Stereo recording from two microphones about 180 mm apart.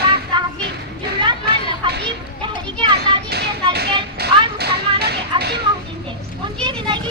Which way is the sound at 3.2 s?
65° right (ahead or behind).